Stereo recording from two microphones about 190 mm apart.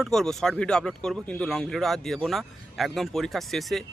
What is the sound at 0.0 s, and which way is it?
Speech, centre (ahead or behind).